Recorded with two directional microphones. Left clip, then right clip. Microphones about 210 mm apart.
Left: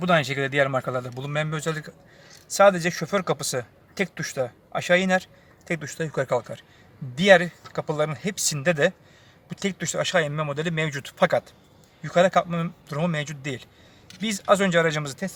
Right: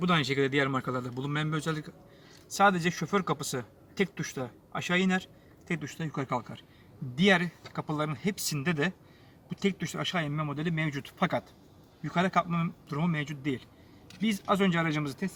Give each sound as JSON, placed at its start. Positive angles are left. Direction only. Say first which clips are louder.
{"t": 0.0, "sound": "a man's voice", "louder": "left 5 dB", "side_deg": 55}